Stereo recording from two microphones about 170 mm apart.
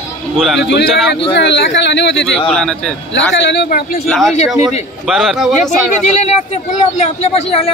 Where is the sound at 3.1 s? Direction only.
90° left; by 4.0 s 60° left (ahead or behind).